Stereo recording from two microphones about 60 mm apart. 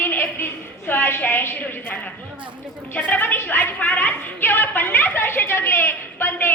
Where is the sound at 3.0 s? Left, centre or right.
Left.